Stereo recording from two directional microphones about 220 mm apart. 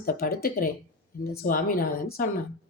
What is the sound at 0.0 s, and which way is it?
A woman's voice, 40° left (ahead or behind).